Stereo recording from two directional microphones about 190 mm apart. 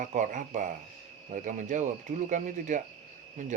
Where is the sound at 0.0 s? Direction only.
45° right (ahead or behind).